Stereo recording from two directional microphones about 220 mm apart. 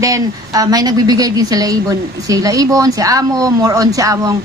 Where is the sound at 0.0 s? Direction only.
15° right (ahead or behind).